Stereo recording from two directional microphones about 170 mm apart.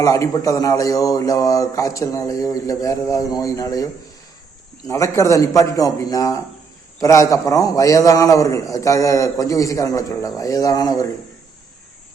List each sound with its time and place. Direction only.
0.0 s a man's voice: 20° left (ahead or behind)
4.9 s a man's voice: 15° left (ahead or behind)